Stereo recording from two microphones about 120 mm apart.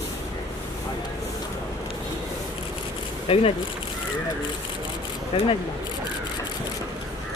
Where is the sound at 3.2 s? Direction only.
55° left (ahead or behind).